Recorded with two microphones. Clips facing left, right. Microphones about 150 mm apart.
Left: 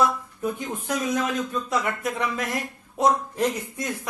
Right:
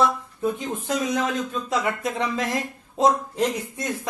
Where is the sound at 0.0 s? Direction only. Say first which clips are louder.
Right 1 dB; 25° right (ahead or behind).